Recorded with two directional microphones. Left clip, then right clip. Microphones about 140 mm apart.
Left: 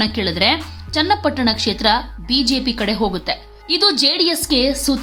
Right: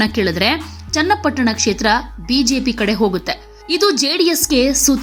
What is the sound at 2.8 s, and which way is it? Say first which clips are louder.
A woman's voice: right 3 dB; 25° right (ahead or behind).